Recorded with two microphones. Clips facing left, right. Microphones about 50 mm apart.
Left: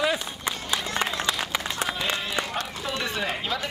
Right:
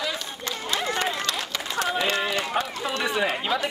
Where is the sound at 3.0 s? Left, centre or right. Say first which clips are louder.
Right 6 dB; centre.